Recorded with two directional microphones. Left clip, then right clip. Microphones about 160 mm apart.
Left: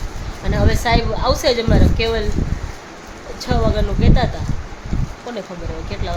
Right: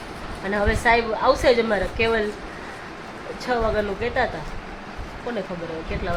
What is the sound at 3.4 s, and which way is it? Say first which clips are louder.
Speech: left 2 dB; 15° left (ahead or behind).